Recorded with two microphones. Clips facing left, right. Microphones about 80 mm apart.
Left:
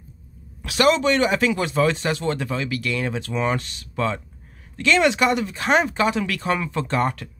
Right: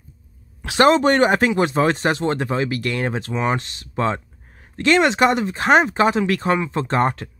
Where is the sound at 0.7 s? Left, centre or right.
Right.